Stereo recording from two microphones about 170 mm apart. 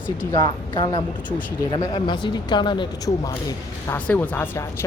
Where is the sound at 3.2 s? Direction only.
15° left (ahead or behind).